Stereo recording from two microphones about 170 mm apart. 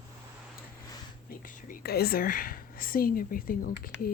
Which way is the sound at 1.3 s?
55° left (ahead or behind).